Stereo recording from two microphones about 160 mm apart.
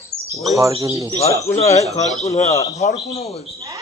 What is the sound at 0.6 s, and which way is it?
Speech, 20° right (ahead or behind).